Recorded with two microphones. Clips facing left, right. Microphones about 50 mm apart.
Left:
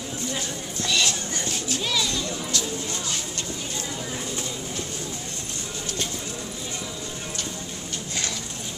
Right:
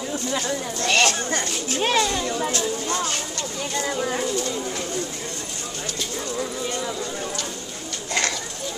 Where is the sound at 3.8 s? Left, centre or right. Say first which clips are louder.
Right 8 dB; right.